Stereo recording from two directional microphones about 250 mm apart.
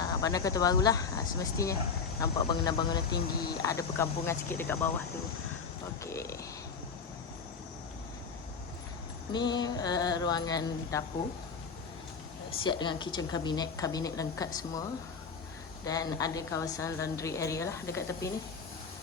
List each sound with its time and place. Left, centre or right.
0.0 s speech: centre
6.0 s speech: centre
9.3 s speech: centre
12.6 s speech: centre